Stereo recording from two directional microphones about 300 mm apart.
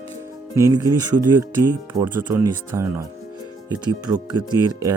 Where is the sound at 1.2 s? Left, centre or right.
Right.